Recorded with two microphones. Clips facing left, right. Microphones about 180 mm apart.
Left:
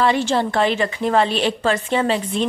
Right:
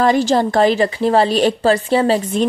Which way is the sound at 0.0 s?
40° right (ahead or behind).